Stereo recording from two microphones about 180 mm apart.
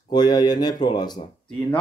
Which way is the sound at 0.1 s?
25° left (ahead or behind).